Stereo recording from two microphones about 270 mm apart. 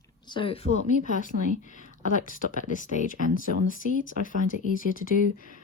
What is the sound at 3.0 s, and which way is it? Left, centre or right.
Speech, right.